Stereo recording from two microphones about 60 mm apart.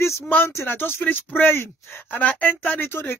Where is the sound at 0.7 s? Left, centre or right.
Left.